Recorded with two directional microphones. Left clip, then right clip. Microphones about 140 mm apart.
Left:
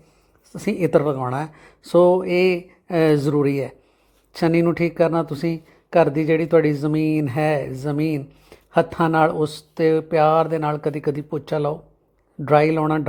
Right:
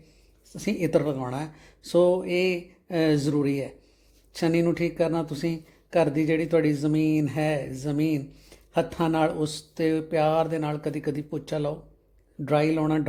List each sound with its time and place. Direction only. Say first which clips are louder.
0.5 s speech: left 6 dB; 30° left (ahead or behind)